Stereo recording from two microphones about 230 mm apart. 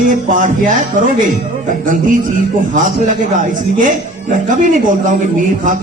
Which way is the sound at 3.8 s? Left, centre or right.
Right.